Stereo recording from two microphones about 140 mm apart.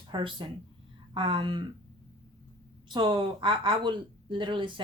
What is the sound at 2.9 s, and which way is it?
Speech, 35° right (ahead or behind).